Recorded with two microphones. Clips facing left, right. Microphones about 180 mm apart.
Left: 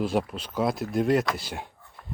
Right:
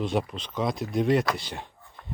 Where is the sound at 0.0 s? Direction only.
Centre (ahead or behind).